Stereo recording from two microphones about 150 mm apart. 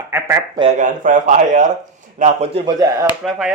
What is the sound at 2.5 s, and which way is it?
Speech, 30° right (ahead or behind).